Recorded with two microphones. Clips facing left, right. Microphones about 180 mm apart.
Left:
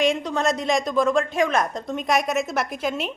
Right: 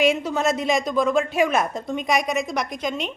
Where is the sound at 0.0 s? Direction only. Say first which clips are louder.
Right 1 dB; 5° right (ahead or behind).